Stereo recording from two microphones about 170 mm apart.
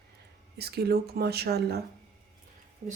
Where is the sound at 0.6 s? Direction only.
70° right (ahead or behind).